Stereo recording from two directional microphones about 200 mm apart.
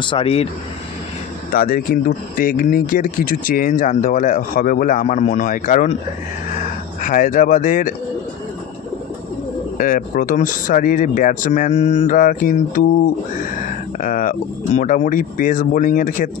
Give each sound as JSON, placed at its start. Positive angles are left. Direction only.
{"t": 0.0, "sound": "speech", "side_deg": 25}
{"t": 1.5, "sound": "speech", "side_deg": 45}
{"t": 7.0, "sound": "speech", "side_deg": 40}
{"t": 9.8, "sound": "speech", "side_deg": 45}